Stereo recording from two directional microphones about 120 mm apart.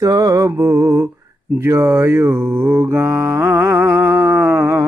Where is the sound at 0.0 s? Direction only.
30° right (ahead or behind).